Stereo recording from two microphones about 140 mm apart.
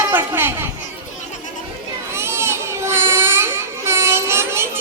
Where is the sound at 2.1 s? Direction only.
20° right (ahead or behind).